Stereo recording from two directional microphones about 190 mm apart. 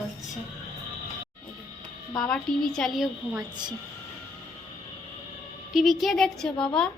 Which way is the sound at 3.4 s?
20° right (ahead or behind).